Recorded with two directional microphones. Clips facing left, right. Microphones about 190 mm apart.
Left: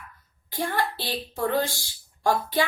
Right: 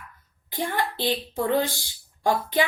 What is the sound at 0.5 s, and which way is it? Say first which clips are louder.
A woman's voice: even; 20° right (ahead or behind).